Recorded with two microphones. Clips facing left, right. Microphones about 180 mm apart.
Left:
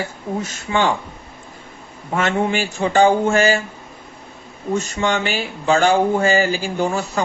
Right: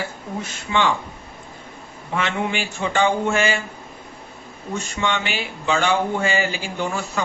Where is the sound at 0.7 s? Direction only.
40° left (ahead or behind).